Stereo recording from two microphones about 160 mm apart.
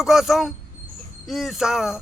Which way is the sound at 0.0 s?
Centre (ahead or behind).